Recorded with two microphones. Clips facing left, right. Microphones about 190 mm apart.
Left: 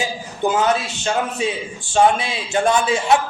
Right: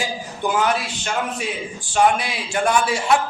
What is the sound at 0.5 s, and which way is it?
A man's voice, 25° left (ahead or behind).